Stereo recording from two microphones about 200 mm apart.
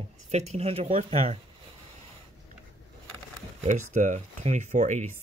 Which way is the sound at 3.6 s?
35° right (ahead or behind).